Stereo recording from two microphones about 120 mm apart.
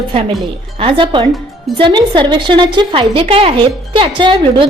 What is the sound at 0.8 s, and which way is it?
A woman's voice, 45° right (ahead or behind).